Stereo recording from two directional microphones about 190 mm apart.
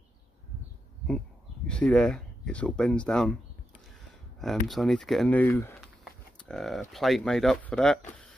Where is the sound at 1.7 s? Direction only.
5° left (ahead or behind).